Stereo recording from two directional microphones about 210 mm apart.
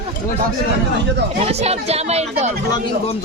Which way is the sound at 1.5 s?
30° right (ahead or behind).